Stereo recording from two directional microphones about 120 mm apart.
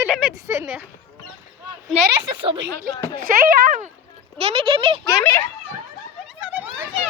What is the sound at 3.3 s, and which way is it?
Speech, 90° right.